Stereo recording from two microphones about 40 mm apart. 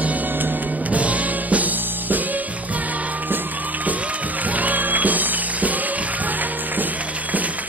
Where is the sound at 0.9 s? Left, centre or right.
Right.